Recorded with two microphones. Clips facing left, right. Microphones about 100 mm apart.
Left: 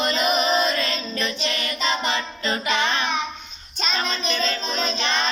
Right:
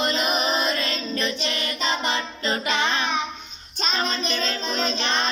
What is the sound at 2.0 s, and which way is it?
Music, 35° right (ahead or behind).